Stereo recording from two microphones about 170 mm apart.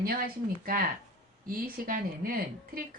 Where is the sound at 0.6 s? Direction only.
55° right (ahead or behind).